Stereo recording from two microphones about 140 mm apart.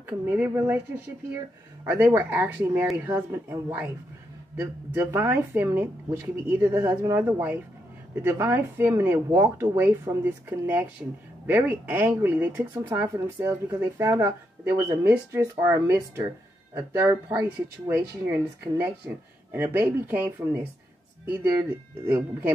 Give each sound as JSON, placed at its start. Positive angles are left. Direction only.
{"t": 0.0, "sound": "speech", "side_deg": -15}
{"t": 1.9, "sound": "speech", "side_deg": -15}
{"t": 4.9, "sound": "speech", "side_deg": -15}